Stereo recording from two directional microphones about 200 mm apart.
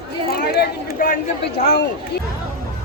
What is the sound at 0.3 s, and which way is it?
Speech, 50° left (ahead or behind).